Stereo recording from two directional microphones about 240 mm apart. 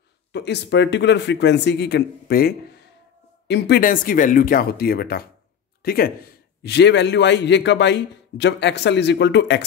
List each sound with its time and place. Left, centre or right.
0.3 s a man's voice: left